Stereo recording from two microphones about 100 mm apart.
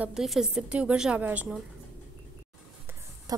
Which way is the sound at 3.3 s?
40° right (ahead or behind).